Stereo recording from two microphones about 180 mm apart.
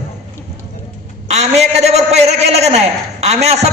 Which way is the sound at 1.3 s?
35° right (ahead or behind).